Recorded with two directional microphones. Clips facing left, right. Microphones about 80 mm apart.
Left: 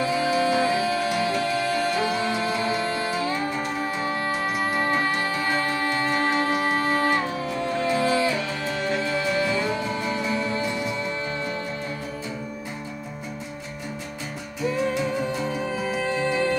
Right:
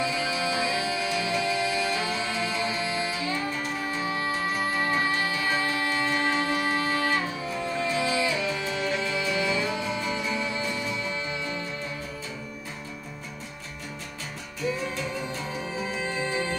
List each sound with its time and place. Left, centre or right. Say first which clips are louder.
0.0 s music: left 6 dB; left
15.1 s music: left 6 dB; left